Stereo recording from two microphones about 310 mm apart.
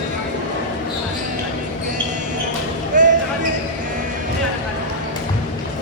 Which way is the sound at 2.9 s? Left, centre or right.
Right.